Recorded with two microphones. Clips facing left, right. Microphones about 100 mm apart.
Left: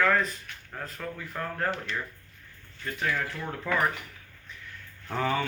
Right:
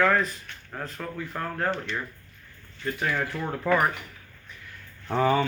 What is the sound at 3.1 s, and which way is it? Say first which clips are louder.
Speech: right 2 dB; 30° right (ahead or behind).